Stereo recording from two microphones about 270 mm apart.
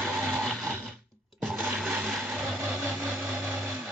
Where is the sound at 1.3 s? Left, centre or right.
Centre.